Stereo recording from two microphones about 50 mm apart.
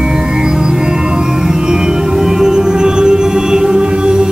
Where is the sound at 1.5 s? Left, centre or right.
Centre.